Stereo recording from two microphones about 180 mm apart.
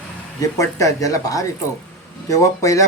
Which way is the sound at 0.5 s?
20° left (ahead or behind).